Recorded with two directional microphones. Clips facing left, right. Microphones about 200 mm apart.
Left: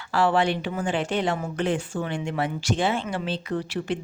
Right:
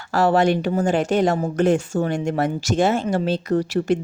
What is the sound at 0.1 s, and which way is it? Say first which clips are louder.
Speech: right 5 dB; 45° right (ahead or behind).